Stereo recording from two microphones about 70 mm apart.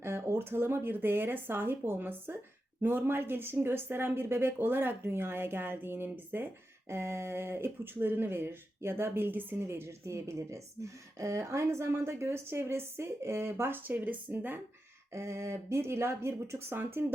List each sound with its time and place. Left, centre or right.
0.0 s speech: right
9.6 s speech: right
15.1 s speech: right